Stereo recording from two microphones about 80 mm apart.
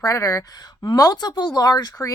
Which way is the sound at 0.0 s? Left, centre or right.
Left.